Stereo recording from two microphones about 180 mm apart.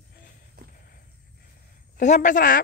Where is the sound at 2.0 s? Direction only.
45° left (ahead or behind).